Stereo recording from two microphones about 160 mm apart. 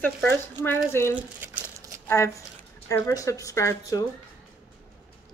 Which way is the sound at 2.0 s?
15° left (ahead or behind).